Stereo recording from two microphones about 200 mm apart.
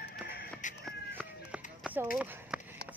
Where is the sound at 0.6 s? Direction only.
40° left (ahead or behind).